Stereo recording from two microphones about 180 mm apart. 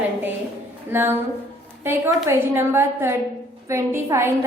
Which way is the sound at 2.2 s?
15° right (ahead or behind).